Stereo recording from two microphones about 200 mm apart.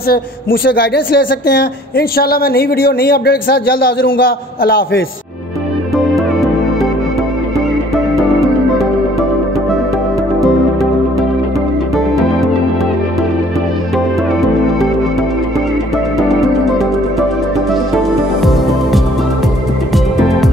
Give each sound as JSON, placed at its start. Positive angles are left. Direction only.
{"t": 0.1, "sound": "speech", "side_deg": 50}
{"t": 5.9, "sound": "music", "side_deg": 0}
{"t": 7.9, "sound": "music", "side_deg": 0}
{"t": 16.2, "sound": "music", "side_deg": 0}